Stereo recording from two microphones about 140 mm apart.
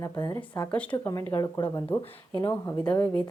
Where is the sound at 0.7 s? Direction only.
10° left (ahead or behind).